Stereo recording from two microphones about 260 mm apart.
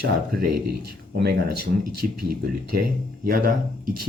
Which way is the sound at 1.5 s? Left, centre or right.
Right.